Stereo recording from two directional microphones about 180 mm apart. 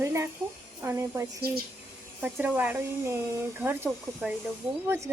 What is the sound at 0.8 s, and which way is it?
A woman's voice, 15° right (ahead or behind).